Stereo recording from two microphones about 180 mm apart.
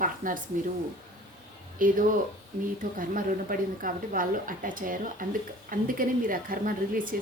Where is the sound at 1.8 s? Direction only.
50° right (ahead or behind).